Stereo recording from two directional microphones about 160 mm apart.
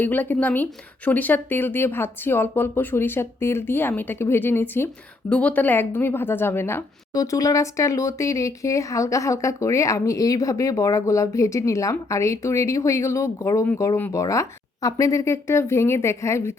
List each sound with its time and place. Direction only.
0.0 s a woman's voice: 10° left (ahead or behind)